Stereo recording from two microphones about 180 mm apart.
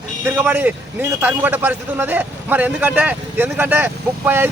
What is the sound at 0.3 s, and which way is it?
Speech, 10° right (ahead or behind).